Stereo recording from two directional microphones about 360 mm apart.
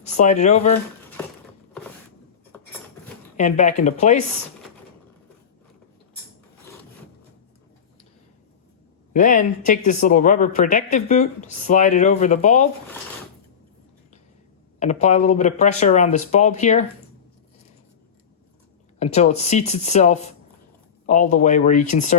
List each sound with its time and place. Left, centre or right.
0.0 s speech: centre
2.5 s patter: centre
3.3 s speech: centre
9.1 s speech: left
14.8 s speech: centre
18.9 s speech: centre